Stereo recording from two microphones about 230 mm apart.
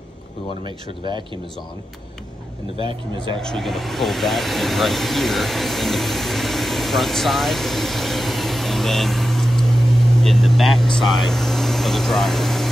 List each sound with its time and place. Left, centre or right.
0.7 s speech: centre
2.8 s speech: right
3.3 s speech: centre